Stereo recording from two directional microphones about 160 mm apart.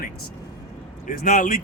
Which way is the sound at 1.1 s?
55° left (ahead or behind).